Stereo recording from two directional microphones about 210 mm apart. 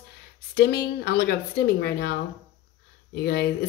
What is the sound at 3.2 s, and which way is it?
Speech, 50° left (ahead or behind).